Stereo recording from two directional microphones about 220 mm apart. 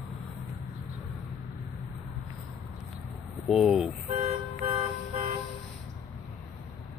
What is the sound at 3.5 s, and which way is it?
Vehicle, centre (ahead or behind).